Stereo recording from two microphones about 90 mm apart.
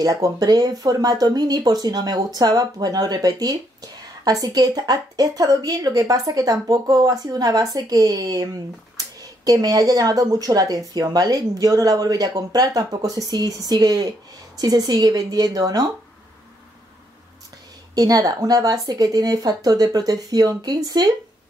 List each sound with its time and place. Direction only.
0.0 s speech: 45° right (ahead or behind)
17.9 s speech: 45° right (ahead or behind)